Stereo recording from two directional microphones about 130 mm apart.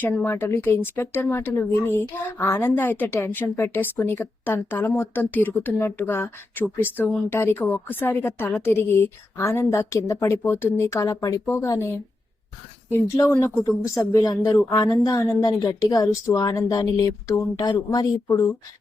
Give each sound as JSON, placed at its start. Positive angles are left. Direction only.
{"t": 0.0, "sound": "a woman's voice", "side_deg": 10}